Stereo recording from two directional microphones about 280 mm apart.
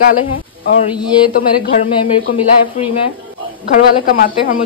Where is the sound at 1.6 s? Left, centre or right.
Left.